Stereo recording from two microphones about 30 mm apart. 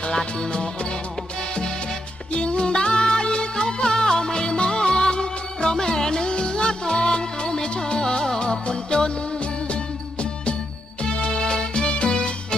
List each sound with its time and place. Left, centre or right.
0.0 s music: left
2.3 s music: left
11.2 s music: left